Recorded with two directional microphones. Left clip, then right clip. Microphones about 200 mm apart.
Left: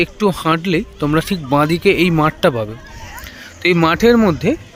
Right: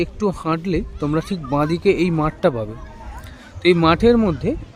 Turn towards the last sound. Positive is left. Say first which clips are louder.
# left 4 dB
turn(degrees=-5)  # may be behind; listen again after turning